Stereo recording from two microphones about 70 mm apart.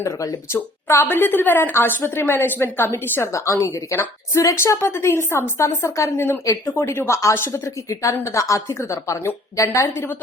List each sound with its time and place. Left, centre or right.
0.5 s a woman's voice: left
3.3 s a woman's voice: left